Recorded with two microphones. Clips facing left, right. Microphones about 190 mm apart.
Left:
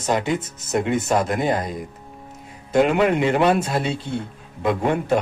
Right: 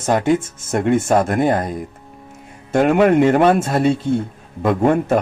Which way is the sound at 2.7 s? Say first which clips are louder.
Right 4 dB; 50° right (ahead or behind).